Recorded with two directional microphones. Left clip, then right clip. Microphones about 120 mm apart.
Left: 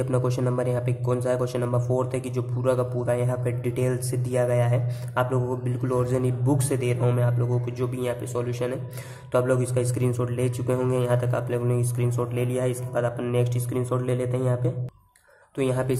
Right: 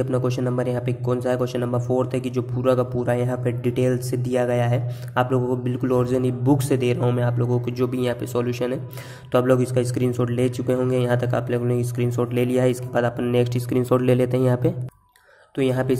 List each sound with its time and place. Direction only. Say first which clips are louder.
0.0 s a man's voice: right 2 dB; 15° right (ahead or behind); by 14.7 s 35° right (ahead or behind)
15.5 s a man's voice: right 4 dB; 20° right (ahead or behind)